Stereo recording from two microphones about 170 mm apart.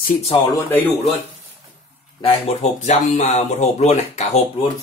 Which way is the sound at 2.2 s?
35° left (ahead or behind).